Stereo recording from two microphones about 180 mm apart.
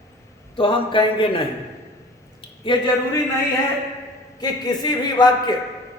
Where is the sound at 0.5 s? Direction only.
30° left (ahead or behind).